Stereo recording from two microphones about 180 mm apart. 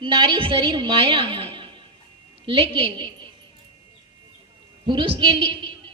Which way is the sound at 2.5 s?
30° right (ahead or behind).